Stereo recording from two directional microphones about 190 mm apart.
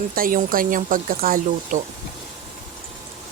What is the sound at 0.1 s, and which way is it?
Speech, 45° right (ahead or behind).